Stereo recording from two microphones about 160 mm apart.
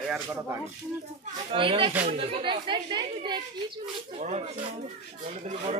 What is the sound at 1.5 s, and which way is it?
Speech, 35° right (ahead or behind).